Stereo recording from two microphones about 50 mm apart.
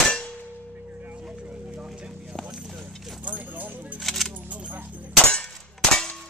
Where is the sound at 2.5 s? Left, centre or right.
Centre.